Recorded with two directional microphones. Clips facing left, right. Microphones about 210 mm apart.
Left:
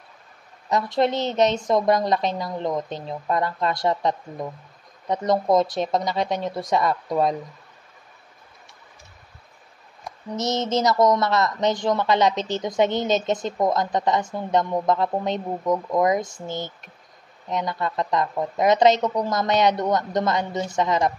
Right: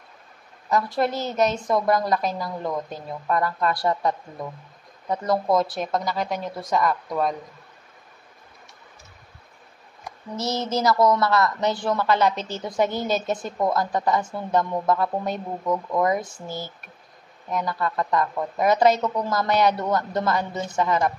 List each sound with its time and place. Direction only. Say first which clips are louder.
0.7 s a woman's voice: left 2 dB; 20° left (ahead or behind)
10.3 s a woman's voice: left 2 dB; 20° left (ahead or behind)
12.4 s a woman's voice: left 5 dB; 10° right (ahead or behind)
12.6 s a woman's voice: left 2 dB; 20° left (ahead or behind)